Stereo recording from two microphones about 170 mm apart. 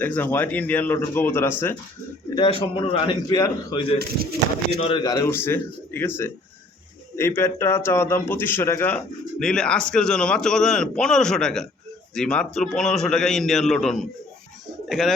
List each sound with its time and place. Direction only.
0.0 s a man's voice: 10° left (ahead or behind)
2.3 s a man's voice: 30° left (ahead or behind)
3.9 s speech: 70° right (ahead or behind)
4.8 s a man's voice: 30° left (ahead or behind); by 15.1 s centre (ahead or behind)